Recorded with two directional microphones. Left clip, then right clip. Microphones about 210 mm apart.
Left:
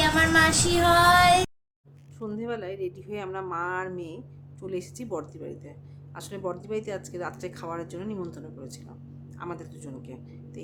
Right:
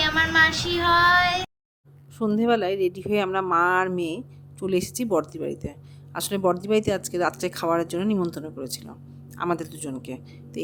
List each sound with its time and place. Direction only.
0.0 s child singing: 20° left (ahead or behind)
2.1 s speech: 40° right (ahead or behind)